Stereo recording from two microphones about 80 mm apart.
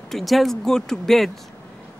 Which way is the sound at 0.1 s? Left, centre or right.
Centre.